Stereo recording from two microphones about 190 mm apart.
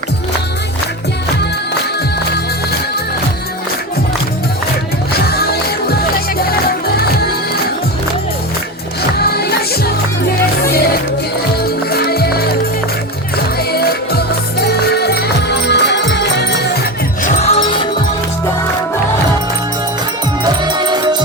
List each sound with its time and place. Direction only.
5.1 s music: 55° left (ahead or behind)
9.1 s music: 55° left (ahead or behind)
11.9 s music: 55° left (ahead or behind)
13.7 s music: 55° left (ahead or behind)
17.2 s music: 35° left (ahead or behind)
20.4 s music: 25° right (ahead or behind)